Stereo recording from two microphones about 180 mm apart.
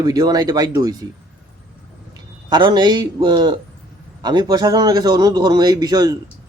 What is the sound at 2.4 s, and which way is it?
Speech, 25° right (ahead or behind).